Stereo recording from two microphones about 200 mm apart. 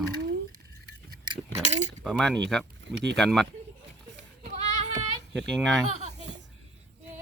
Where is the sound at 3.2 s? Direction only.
Centre (ahead or behind).